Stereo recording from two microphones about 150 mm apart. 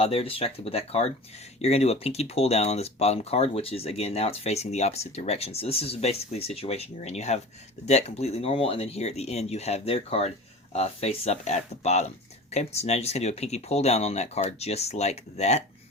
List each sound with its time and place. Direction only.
0.0 s speech: 40° left (ahead or behind)